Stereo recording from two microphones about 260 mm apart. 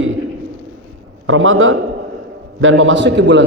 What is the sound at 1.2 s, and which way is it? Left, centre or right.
A man's voice, right.